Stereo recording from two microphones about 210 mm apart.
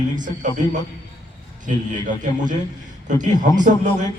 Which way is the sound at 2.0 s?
35° right (ahead or behind).